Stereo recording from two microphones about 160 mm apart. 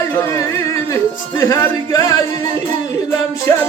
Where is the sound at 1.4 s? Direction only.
20° left (ahead or behind).